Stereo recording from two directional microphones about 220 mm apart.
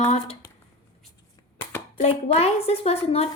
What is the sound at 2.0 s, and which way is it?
A woman's voice, 30° left (ahead or behind).